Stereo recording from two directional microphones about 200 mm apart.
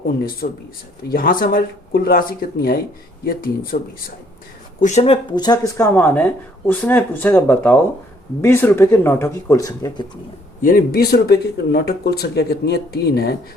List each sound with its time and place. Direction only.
0.4 s speech: 50° left (ahead or behind)
4.8 s speech: 35° left (ahead or behind); by 10.1 s 15° left (ahead or behind)
10.6 s speech: 45° left (ahead or behind)